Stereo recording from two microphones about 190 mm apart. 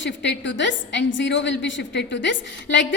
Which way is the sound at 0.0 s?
70° left (ahead or behind).